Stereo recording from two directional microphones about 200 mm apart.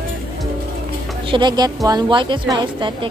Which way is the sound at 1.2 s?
25° right (ahead or behind).